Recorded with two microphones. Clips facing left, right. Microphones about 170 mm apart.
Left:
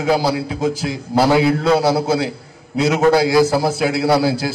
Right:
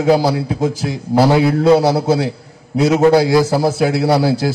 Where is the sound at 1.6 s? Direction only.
15° right (ahead or behind).